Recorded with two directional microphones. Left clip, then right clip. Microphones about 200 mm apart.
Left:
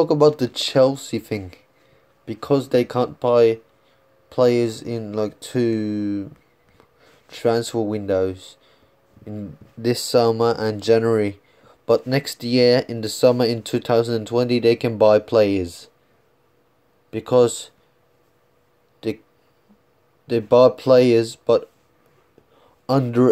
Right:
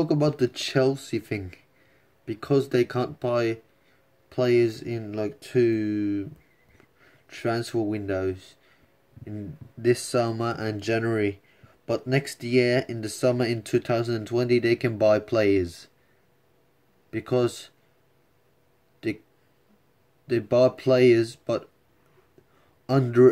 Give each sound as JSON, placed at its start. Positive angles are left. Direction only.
{"t": 0.0, "sound": "speech", "side_deg": 5}
{"t": 7.4, "sound": "speech", "side_deg": 10}
{"t": 10.1, "sound": "speech", "side_deg": 5}
{"t": 17.1, "sound": "speech", "side_deg": 5}
{"t": 20.2, "sound": "speech", "side_deg": 5}
{"t": 22.8, "sound": "speech", "side_deg": 5}